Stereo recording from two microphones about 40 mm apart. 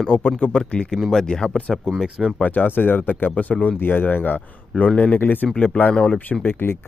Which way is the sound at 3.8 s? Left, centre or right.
Left.